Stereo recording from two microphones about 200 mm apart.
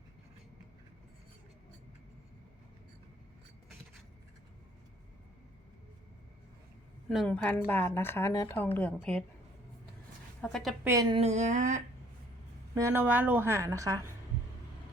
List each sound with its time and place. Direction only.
7.1 s speech: 5° left (ahead or behind)
10.4 s a woman's voice: centre (ahead or behind)
10.8 s speech: 20° right (ahead or behind)
11.2 s a sound: 35° right (ahead or behind)
12.7 s a woman's voice: 10° right (ahead or behind)